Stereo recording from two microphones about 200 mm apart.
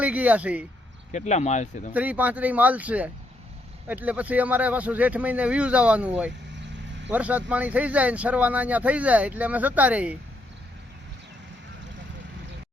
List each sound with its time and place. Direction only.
0.0 s speech: 5° right (ahead or behind)
1.1 s speech: 35° left (ahead or behind)
1.9 s speech: 10° right (ahead or behind)